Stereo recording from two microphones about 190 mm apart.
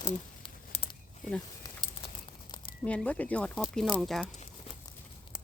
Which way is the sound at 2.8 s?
5° left (ahead or behind).